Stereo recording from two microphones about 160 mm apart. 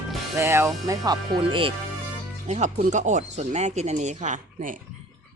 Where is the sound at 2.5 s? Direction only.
50° right (ahead or behind).